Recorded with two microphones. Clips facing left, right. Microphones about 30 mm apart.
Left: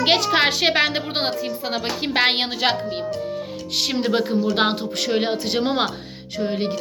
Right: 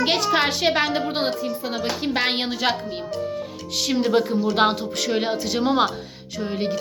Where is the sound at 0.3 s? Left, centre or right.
Left.